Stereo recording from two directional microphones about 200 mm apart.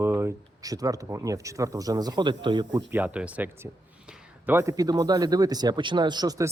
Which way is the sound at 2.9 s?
10° right (ahead or behind).